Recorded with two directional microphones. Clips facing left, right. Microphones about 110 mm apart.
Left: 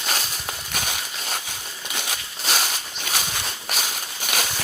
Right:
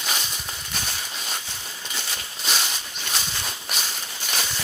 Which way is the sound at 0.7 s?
65° left (ahead or behind).